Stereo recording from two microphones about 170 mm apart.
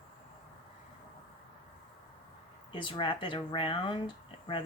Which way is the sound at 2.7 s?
30° left (ahead or behind).